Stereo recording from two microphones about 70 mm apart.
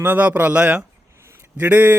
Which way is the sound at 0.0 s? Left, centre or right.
Right.